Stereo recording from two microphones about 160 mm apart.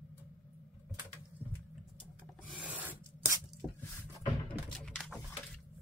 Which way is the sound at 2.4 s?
5° right (ahead or behind).